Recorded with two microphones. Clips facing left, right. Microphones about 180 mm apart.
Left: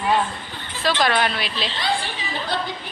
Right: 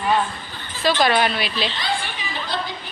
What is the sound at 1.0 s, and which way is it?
Speech, 5° right (ahead or behind).